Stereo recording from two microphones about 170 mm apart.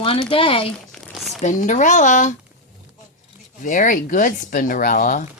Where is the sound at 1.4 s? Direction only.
45° left (ahead or behind).